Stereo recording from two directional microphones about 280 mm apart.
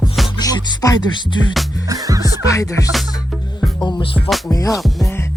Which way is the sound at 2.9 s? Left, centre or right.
Centre.